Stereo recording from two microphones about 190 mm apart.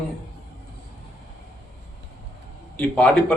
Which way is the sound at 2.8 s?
5° left (ahead or behind).